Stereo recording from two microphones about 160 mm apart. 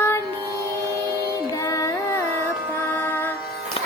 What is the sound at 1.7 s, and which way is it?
Music, 20° left (ahead or behind).